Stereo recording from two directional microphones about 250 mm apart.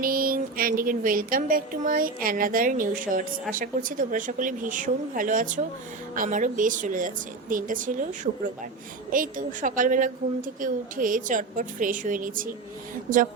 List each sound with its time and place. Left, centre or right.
0.0 s speech: right